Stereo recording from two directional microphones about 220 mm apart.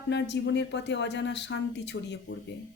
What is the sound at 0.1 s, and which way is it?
Speech, 50° left (ahead or behind).